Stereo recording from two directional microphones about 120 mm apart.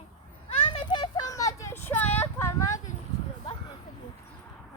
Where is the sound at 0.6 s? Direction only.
45° left (ahead or behind).